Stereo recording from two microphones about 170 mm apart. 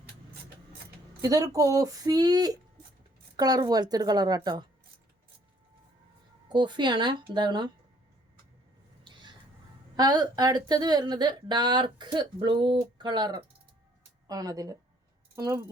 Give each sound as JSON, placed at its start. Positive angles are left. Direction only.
{"t": 1.2, "sound": "speech", "side_deg": -20}
{"t": 6.5, "sound": "speech", "side_deg": -25}
{"t": 9.9, "sound": "speech", "side_deg": -25}